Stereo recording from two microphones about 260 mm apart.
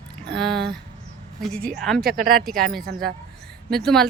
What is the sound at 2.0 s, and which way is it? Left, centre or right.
Speech, right.